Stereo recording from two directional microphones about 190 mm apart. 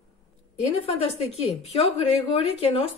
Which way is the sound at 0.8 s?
30° left (ahead or behind).